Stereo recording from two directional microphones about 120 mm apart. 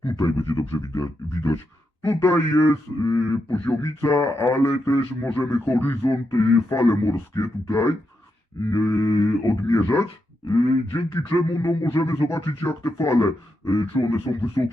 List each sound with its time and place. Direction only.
0.2 s speech: 30° left (ahead or behind)